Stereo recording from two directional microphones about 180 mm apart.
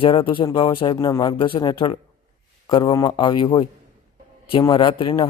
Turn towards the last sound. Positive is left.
turn(degrees=30)  # may be behind; listen again after turning